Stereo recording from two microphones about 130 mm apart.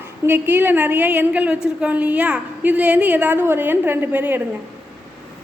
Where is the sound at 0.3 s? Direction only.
15° right (ahead or behind).